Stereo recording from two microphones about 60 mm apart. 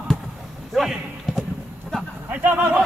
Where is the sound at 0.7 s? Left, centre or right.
Centre.